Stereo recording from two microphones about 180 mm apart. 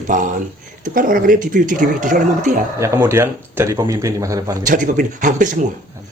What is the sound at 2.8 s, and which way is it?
Speech, 15° right (ahead or behind).